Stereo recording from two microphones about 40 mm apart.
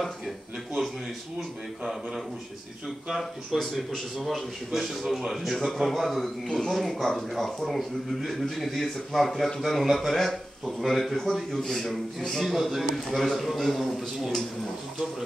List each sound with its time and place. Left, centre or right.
3.2 s speech: centre
10.6 s speech: centre
11.0 s speech: centre